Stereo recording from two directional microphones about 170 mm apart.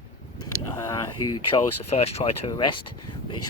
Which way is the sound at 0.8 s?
20° left (ahead or behind).